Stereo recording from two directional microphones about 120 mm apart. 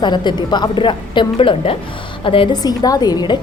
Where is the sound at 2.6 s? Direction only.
30° left (ahead or behind).